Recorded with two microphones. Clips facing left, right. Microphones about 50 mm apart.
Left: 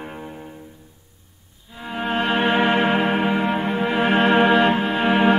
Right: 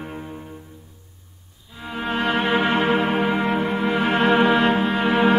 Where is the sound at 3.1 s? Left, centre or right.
Centre.